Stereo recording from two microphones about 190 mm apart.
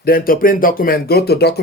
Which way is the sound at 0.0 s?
50° left (ahead or behind).